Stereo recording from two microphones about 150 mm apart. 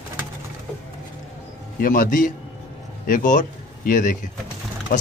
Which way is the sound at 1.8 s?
65° left (ahead or behind).